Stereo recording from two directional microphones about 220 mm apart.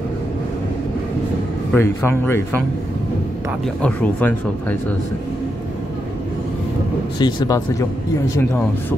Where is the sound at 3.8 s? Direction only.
5° left (ahead or behind).